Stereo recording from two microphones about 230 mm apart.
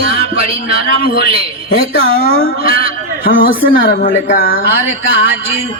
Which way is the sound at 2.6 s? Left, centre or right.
Left.